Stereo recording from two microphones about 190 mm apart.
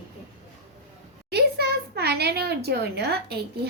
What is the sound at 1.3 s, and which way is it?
Speech, 60° right (ahead or behind).